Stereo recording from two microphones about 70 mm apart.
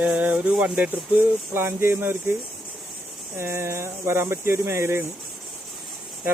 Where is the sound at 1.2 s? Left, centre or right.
Right.